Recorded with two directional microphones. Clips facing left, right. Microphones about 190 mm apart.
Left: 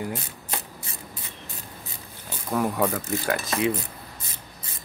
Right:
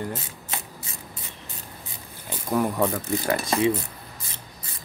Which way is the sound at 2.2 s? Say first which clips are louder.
Right 2 dB; 5° right (ahead or behind).